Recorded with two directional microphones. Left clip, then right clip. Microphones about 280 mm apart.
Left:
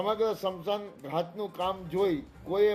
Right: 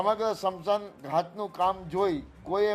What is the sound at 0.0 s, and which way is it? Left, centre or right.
A man's voice, centre.